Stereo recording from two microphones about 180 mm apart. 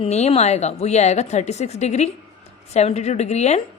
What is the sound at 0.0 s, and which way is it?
A woman's voice, 35° left (ahead or behind).